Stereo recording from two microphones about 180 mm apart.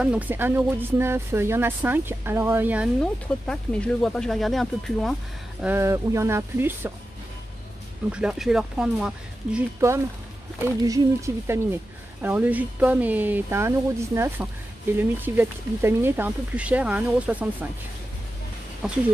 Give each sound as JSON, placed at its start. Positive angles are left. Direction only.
{"t": 0.0, "sound": "speech", "side_deg": -5}
{"t": 3.0, "sound": "speech", "side_deg": 5}
{"t": 5.6, "sound": "speech", "side_deg": -10}
{"t": 8.1, "sound": "speech", "side_deg": -5}
{"t": 10.6, "sound": "speech", "side_deg": -20}